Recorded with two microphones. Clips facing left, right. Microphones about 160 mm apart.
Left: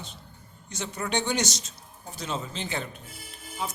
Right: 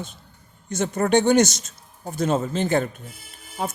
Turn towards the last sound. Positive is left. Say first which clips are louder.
# right 5 dB
turn(degrees=-50)  # may be behind; listen again after turning